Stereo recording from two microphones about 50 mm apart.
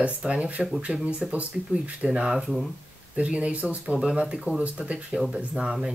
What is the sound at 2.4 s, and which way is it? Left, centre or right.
Speech, centre.